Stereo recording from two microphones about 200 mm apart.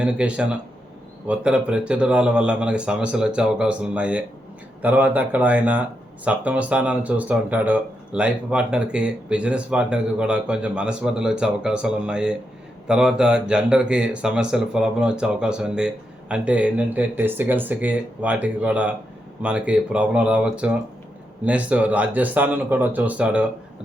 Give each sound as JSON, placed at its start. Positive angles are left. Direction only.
{"t": 0.0, "sound": "speech", "side_deg": -5}